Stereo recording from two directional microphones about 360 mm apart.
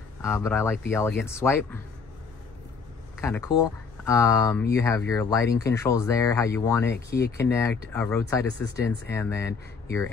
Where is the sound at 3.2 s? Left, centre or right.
Centre.